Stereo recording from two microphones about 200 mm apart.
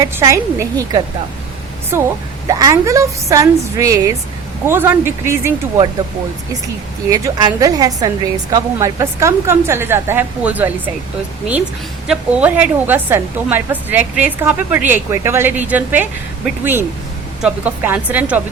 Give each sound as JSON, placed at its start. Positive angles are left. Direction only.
{"t": 0.0, "sound": "a woman's voice", "side_deg": -15}
{"t": 7.1, "sound": "a woman's voice", "side_deg": -20}
{"t": 12.0, "sound": "a woman's voice", "side_deg": -5}
{"t": 17.4, "sound": "a woman's voice", "side_deg": -5}